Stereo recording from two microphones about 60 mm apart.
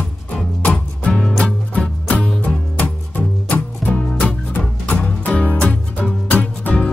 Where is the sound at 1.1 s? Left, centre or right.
Centre.